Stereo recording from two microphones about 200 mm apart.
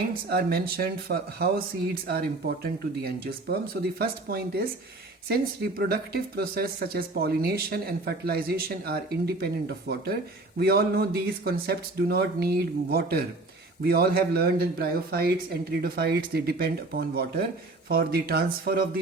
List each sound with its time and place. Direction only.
0.3 s speech: 50° right (ahead or behind)
3.0 s speech: 50° right (ahead or behind)